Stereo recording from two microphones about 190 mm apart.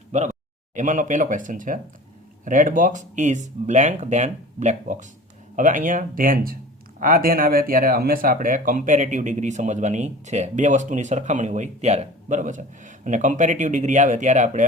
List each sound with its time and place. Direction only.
0.1 s speech: 35° right (ahead or behind)